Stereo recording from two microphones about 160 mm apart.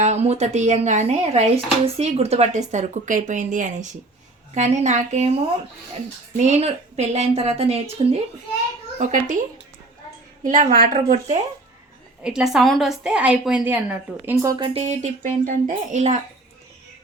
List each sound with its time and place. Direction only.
0.0 s speech: 45° right (ahead or behind)
6.4 s a woman's voice: 40° right (ahead or behind)
9.0 s speech: 55° right (ahead or behind)
10.4 s a woman's voice: 55° right (ahead or behind)
12.2 s a woman's voice: 5° right (ahead or behind)
14.4 s speech: 30° right (ahead or behind); by 16.2 s 45° right (ahead or behind)